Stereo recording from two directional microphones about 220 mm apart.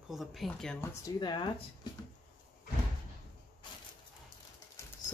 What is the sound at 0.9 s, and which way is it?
Speech, 20° left (ahead or behind).